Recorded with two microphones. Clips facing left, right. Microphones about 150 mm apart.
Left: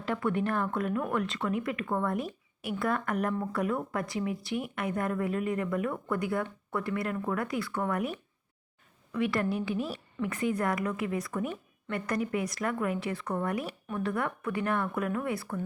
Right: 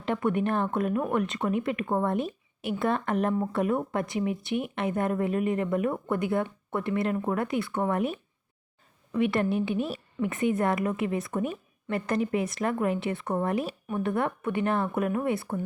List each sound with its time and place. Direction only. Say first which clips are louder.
0.0 s speech: right 3 dB; 20° right (ahead or behind)
9.1 s speech: right 4 dB; 25° right (ahead or behind)